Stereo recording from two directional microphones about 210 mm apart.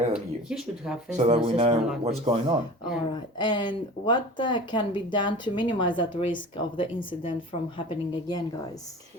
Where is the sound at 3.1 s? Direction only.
20° left (ahead or behind).